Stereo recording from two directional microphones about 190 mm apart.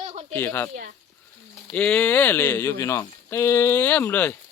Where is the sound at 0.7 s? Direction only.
50° right (ahead or behind).